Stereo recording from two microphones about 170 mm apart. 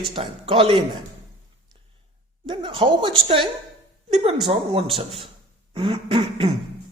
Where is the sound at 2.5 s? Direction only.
30° right (ahead or behind).